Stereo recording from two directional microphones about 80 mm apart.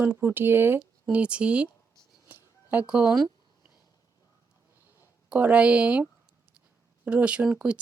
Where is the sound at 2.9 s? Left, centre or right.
Centre.